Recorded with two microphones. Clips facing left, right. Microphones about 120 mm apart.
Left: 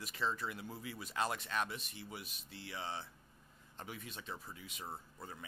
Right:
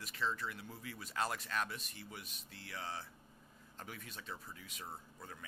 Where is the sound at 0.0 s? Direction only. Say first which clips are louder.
Left 1 dB; 15° left (ahead or behind).